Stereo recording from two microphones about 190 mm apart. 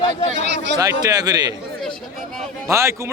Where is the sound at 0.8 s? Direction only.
20° right (ahead or behind).